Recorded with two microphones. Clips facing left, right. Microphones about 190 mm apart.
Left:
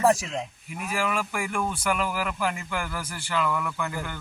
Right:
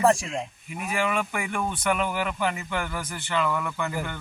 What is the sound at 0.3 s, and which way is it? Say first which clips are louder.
Speech: right 1 dB; centre (ahead or behind).